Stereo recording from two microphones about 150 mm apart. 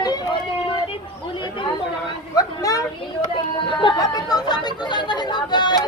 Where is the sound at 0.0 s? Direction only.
25° left (ahead or behind).